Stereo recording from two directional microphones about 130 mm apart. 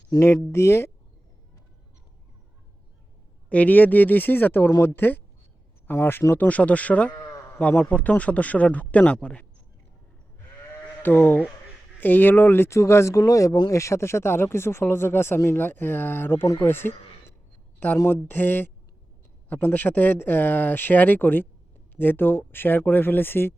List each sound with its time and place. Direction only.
0.1 s speech: 25° left (ahead or behind)
3.5 s a man's voice: 10° left (ahead or behind)
11.0 s a man's voice: 15° left (ahead or behind)